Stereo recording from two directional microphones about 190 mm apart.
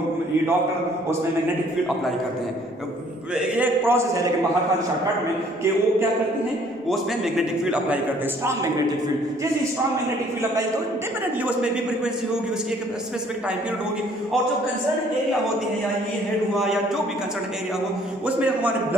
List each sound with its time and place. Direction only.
3.3 s a man's voice: 10° right (ahead or behind)
6.9 s a man's voice: 5° right (ahead or behind)
18.2 s a man's voice: 5° right (ahead or behind)